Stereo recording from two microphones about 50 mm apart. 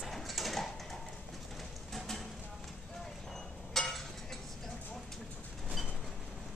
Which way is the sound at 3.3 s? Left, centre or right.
Centre.